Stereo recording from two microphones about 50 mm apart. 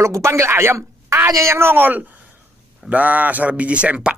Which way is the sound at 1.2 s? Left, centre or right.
Right.